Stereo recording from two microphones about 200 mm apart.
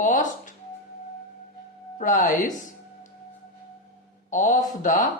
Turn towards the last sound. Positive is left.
turn(degrees=40)  # may be behind; listen again after turning